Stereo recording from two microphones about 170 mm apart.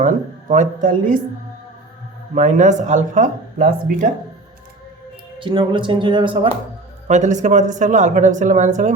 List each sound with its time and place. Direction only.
0.0 s speech: 45° right (ahead or behind)
2.3 s speech: 45° right (ahead or behind)
5.4 s speech: 30° right (ahead or behind)
7.1 s speech: 45° right (ahead or behind)